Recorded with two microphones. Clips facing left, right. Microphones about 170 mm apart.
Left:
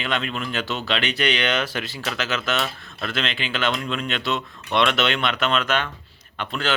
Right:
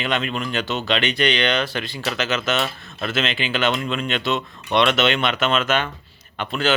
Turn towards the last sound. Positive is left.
turn(degrees=-5)  # may be behind; listen again after turning